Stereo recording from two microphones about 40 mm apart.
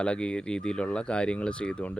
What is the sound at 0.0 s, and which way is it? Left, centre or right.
Speech, left.